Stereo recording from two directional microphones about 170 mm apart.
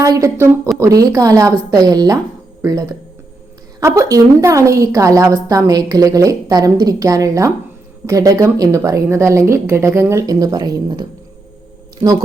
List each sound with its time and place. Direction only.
0.0 s a woman's voice: 20° right (ahead or behind)